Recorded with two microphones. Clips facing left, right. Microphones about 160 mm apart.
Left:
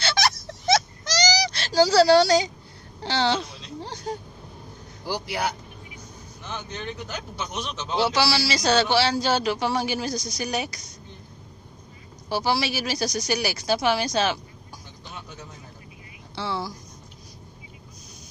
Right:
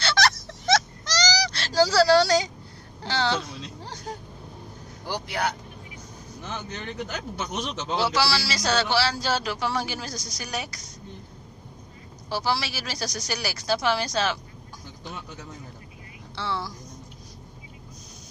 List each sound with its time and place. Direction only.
0.0 s a sound: 15° left (ahead or behind)
3.0 s a man's voice: 20° left (ahead or behind)
5.0 s speech: 5° left (ahead or behind)
7.9 s a man's voice: 20° left (ahead or behind)
12.3 s a woman's voice: 15° left (ahead or behind)
16.3 s speech: 15° left (ahead or behind)